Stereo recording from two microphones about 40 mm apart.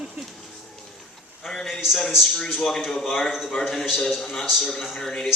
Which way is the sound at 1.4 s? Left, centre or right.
Centre.